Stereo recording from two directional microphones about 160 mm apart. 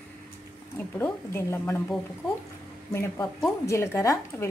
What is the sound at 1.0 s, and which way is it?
Speech, 15° left (ahead or behind).